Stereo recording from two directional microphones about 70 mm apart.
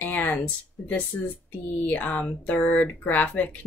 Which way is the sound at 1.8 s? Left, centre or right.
Left.